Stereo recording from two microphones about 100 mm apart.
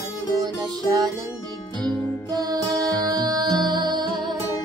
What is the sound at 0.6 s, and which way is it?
Music, 40° right (ahead or behind).